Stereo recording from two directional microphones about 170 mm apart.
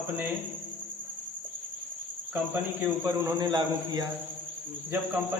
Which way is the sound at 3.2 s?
20° right (ahead or behind).